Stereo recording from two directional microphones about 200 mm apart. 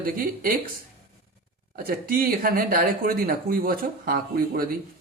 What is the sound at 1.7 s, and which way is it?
Speech, 45° right (ahead or behind).